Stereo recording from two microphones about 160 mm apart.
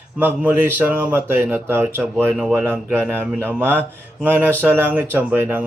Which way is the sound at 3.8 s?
10° right (ahead or behind).